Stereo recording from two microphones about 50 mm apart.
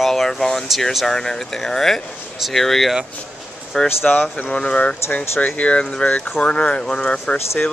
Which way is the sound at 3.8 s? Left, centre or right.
Left.